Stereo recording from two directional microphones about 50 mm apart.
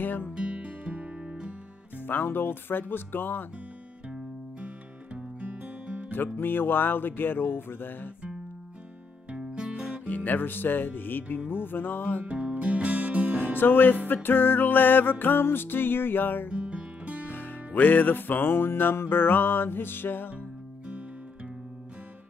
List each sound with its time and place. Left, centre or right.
0.0 s speech: left
0.3 s music: centre
2.0 s music: left
4.1 s music: right
6.1 s music: left
9.3 s music: centre
10.0 s music: left
12.3 s music: right
13.6 s music: left
16.4 s music: right
17.3 s music: left